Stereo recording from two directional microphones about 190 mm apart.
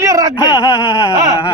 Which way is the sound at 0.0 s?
15° right (ahead or behind).